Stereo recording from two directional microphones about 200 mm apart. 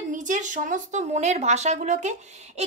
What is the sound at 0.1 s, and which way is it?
Speech, 40° right (ahead or behind).